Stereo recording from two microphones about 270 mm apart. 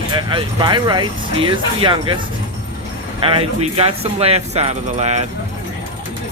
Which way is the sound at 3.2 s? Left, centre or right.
Right.